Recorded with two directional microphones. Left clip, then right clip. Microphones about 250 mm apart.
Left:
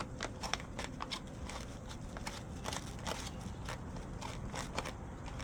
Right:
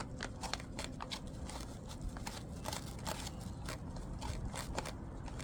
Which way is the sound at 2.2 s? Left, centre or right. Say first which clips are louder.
Left 2 dB; centre.